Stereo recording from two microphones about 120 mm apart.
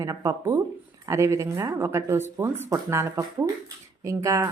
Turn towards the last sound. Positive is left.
turn(degrees=-25)  # may be behind; listen again after turning